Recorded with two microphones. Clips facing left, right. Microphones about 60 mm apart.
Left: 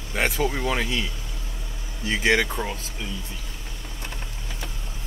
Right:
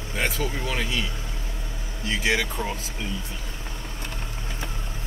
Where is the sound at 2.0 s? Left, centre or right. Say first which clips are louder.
Left 3 dB; centre.